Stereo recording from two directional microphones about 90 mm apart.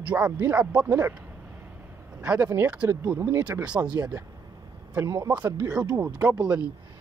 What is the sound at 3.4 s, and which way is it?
Speech, 15° right (ahead or behind).